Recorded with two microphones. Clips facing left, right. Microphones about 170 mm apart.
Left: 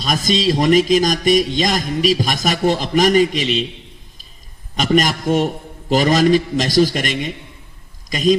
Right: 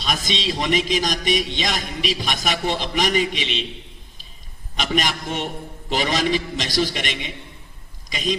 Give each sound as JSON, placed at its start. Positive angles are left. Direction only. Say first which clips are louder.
{"t": 0.0, "sound": "music", "louder": "left 7 dB", "side_deg": 45}
{"t": 4.8, "sound": "music", "louder": "left 7 dB", "side_deg": 45}